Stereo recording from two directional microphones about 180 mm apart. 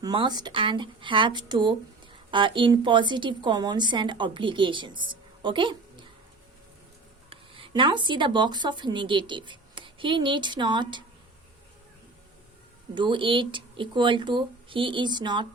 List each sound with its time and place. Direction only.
0.0 s a woman's voice: 25° right (ahead or behind)
7.3 s speech: 30° right (ahead or behind)
12.9 s a woman's voice: 25° right (ahead or behind)